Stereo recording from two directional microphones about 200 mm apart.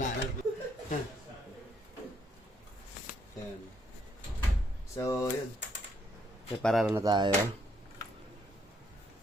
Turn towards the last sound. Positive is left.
turn(degrees=-20)  # may be behind; listen again after turning